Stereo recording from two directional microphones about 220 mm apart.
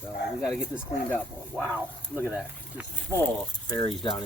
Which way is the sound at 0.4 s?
5° right (ahead or behind).